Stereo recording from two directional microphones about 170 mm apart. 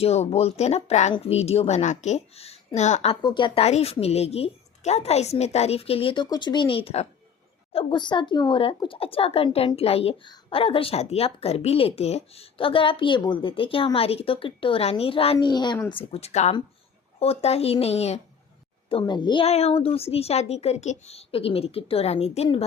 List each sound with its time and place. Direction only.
0.0 s a woman's voice: 35° left (ahead or behind)
3.2 s a woman's voice: 25° left (ahead or behind)